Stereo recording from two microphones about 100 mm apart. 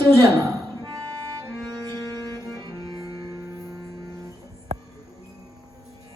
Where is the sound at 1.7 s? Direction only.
45° right (ahead or behind).